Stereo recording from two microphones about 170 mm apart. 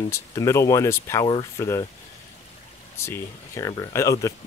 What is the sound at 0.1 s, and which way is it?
Speech, 15° left (ahead or behind).